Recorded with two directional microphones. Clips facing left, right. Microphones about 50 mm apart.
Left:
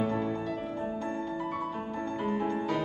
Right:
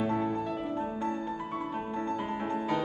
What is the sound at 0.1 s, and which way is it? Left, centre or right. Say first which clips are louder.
Music: right 1 dB; right.